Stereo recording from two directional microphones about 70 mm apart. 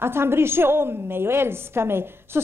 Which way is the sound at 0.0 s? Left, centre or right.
Right.